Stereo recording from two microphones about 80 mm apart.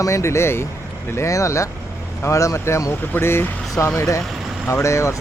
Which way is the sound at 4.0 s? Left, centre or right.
Left.